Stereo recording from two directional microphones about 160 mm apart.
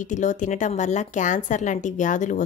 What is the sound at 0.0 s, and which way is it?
Speech, 50° left (ahead or behind).